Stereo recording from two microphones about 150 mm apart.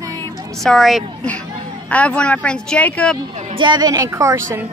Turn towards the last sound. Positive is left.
turn(degrees=-15)  # may be behind; listen again after turning